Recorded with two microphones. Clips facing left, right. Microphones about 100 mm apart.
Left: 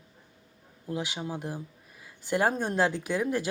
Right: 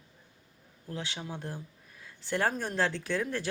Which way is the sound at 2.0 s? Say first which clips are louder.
Left 4 dB; 10° left (ahead or behind).